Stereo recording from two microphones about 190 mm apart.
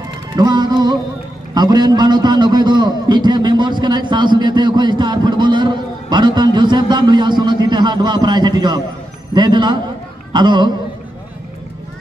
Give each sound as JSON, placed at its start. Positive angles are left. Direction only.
{"t": 0.4, "sound": "a man's voice", "side_deg": -20}